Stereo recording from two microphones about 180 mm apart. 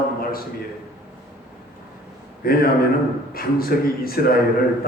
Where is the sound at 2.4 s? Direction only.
55° left (ahead or behind).